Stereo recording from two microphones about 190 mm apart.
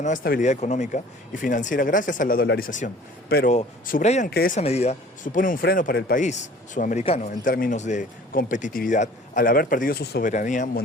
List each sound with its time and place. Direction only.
0.0 s speech: 45° left (ahead or behind)
4.3 s speech: 50° left (ahead or behind)
4.6 s speech: 35° left (ahead or behind); by 10.2 s 55° left (ahead or behind)
10.2 s speech: 40° left (ahead or behind)